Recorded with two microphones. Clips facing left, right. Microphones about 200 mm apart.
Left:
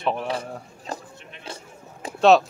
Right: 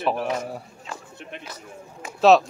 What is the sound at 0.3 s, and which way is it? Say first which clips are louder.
Speech: right 1 dB; 30° left (ahead or behind).